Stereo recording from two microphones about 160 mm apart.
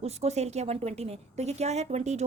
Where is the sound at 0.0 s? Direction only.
40° right (ahead or behind).